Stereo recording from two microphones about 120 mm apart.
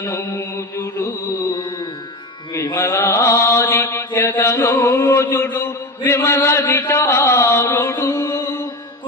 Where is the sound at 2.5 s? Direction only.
25° left (ahead or behind).